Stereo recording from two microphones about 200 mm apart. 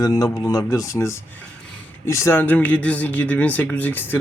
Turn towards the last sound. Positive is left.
turn(degrees=10)  # may be behind; listen again after turning